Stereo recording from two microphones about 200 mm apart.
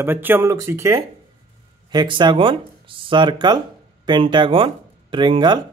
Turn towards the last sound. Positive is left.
turn(degrees=-25)  # may be behind; listen again after turning